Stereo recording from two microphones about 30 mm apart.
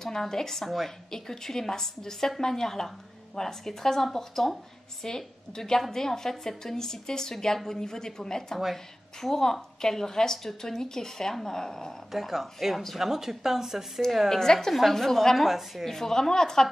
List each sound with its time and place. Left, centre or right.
0.0 s a woman's voice: centre
12.1 s speech: centre
14.3 s a woman's voice: centre
14.7 s a woman's voice: centre
15.3 s speech: centre
15.8 s a woman's voice: centre